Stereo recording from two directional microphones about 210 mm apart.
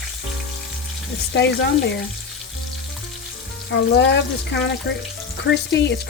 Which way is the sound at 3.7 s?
60° left (ahead or behind).